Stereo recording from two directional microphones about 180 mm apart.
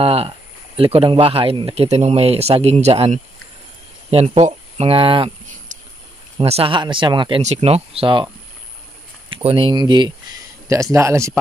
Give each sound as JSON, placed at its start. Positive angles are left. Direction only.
{"t": 0.0, "sound": "speech", "side_deg": -35}
{"t": 6.3, "sound": "speech", "side_deg": -35}
{"t": 9.3, "sound": "speech", "side_deg": -30}